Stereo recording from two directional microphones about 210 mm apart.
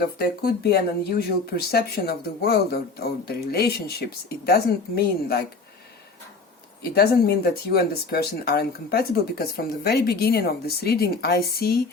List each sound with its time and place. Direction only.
0.0 s speech: 50° left (ahead or behind)
6.9 s speech: 50° left (ahead or behind)